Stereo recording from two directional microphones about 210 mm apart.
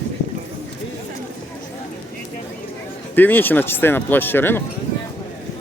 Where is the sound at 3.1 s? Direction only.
10° left (ahead or behind).